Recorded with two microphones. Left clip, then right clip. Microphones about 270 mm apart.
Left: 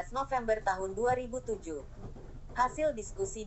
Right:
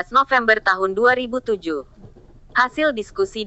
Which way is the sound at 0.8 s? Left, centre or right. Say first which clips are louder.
Right 14 dB; right.